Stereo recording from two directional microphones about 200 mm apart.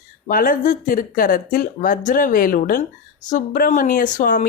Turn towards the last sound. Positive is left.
turn(degrees=40)  # may be behind; listen again after turning